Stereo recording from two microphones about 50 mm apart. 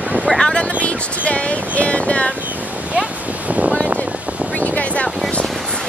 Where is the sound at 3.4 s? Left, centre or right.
Right.